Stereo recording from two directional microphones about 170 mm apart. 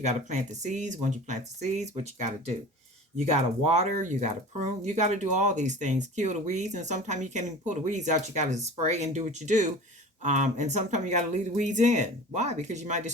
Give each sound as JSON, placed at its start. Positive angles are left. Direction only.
{"t": 0.0, "sound": "speech", "side_deg": -45}